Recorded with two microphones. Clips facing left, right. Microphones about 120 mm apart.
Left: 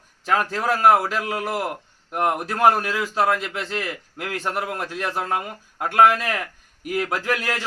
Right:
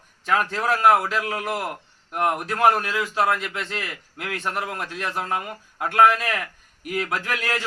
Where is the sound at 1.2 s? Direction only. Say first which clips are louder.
Left 1 dB; 30° left (ahead or behind).